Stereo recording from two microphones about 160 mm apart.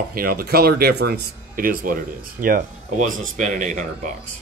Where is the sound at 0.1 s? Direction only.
65° right (ahead or behind).